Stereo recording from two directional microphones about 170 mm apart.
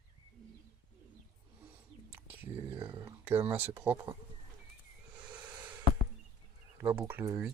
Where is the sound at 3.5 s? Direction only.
10° right (ahead or behind).